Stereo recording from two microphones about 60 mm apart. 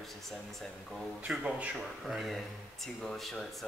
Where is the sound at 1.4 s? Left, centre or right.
Right.